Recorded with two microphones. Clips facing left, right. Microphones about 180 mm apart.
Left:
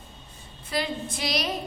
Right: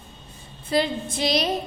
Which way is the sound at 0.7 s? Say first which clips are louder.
Right 6 dB; 25° right (ahead or behind).